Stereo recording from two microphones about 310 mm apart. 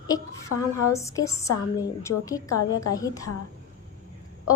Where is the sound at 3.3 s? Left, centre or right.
Left.